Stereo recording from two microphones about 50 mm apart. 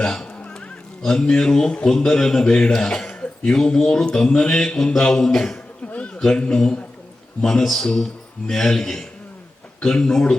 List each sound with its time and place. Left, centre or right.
0.0 s speech: centre
0.4 s music: left
1.0 s speech: centre
5.8 s a sound: left
6.1 s speech: centre
7.6 s speech: centre